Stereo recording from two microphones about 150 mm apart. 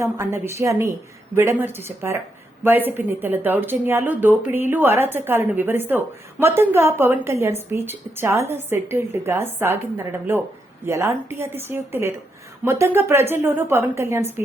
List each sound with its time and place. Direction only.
0.0 s a woman's voice: 20° right (ahead or behind)